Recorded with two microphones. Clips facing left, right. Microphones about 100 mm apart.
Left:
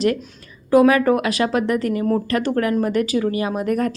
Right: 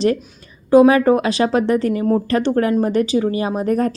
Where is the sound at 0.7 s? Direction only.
25° right (ahead or behind).